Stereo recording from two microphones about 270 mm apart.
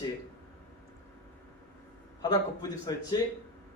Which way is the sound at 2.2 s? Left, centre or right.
Centre.